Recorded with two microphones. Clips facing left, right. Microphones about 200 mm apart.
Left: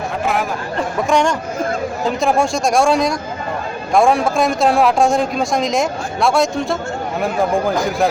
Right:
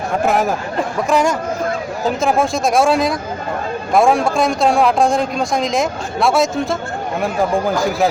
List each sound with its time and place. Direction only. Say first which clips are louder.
0.3 s speech: right 4 dB; 45° right (ahead or behind)
1.1 s a man's voice: right 1 dB; 5° right (ahead or behind)